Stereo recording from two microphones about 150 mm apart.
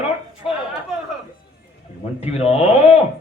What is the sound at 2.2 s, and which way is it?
Speech, 45° left (ahead or behind).